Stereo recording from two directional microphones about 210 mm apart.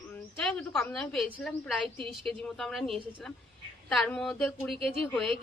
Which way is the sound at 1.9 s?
25° right (ahead or behind).